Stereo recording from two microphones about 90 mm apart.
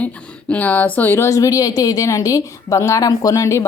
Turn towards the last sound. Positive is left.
turn(degrees=35)  # may be behind; listen again after turning